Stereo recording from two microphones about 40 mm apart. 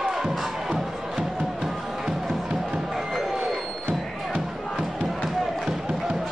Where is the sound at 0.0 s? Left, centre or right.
Centre.